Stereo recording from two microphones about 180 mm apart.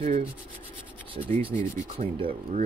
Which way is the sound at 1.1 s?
30° right (ahead or behind).